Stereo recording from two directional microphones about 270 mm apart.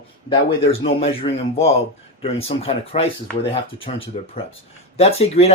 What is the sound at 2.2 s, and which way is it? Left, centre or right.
Speech, left.